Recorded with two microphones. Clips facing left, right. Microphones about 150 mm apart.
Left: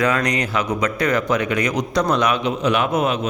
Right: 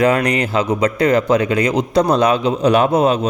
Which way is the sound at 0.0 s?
30° right (ahead or behind).